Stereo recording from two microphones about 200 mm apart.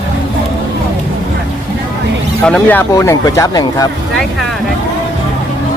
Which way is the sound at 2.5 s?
5° left (ahead or behind).